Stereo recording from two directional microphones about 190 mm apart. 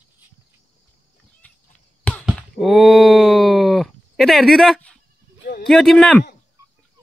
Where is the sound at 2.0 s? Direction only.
10° left (ahead or behind).